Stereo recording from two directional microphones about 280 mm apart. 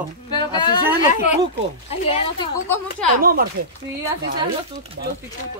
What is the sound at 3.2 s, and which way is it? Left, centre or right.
Speech, right.